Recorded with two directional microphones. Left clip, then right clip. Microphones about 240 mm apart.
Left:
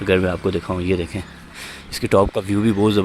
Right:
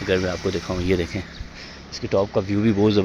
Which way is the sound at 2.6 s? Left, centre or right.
Centre.